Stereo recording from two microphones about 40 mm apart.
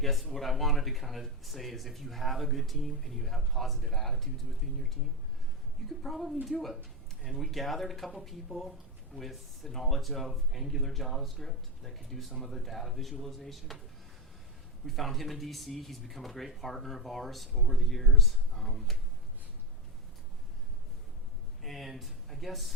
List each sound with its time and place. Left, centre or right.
0.0 s speech: centre
6.0 s speech: centre
14.8 s speech: centre
21.6 s speech: centre